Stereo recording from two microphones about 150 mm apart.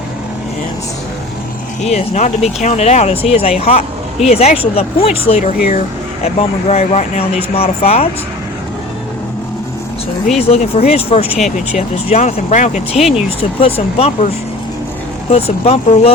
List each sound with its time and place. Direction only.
1.8 s speech: 45° left (ahead or behind)
10.3 s speech: 40° left (ahead or behind)
11.3 s speech: 5° right (ahead or behind)
11.8 s speech: 45° left (ahead or behind)
15.3 s speech: 40° left (ahead or behind)